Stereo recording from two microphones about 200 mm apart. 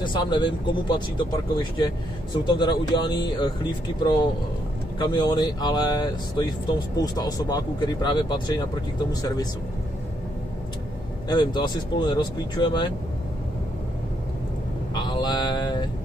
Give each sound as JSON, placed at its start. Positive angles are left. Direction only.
{"t": 0.0, "sound": "speech", "side_deg": 20}
{"t": 5.0, "sound": "speech", "side_deg": 20}
{"t": 11.2, "sound": "speech", "side_deg": 20}
{"t": 15.0, "sound": "a sound", "side_deg": 20}